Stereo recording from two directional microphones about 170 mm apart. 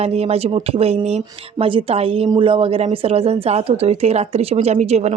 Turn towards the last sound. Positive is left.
turn(degrees=-40)  # may be behind; listen again after turning